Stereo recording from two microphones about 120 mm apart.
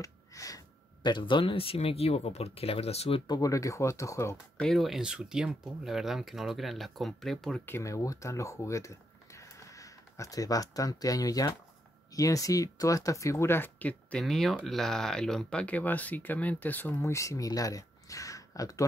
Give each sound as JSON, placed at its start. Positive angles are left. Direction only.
{"t": 0.0, "sound": "a sound", "side_deg": 30}
{"t": 1.0, "sound": "speech", "side_deg": 40}
{"t": 3.3, "sound": "speech", "side_deg": 30}
{"t": 4.6, "sound": "speech", "side_deg": 0}
{"t": 7.6, "sound": "speech", "side_deg": 20}